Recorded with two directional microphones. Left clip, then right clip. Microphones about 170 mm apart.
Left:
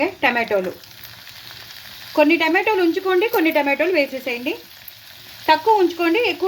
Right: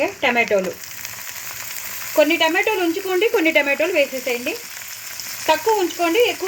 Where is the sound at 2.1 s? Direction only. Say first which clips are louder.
Even; 15° left (ahead or behind).